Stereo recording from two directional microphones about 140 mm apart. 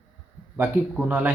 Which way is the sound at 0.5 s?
15° right (ahead or behind).